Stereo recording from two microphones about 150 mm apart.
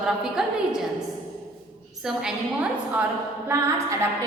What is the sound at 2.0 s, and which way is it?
A woman's voice, 5° right (ahead or behind).